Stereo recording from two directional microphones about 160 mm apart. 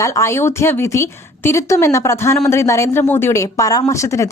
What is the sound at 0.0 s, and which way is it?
A woman's voice, 20° left (ahead or behind).